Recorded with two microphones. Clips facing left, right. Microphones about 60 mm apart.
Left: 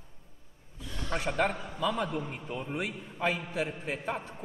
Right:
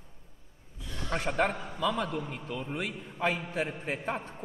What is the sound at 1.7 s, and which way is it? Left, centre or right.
Speech, centre.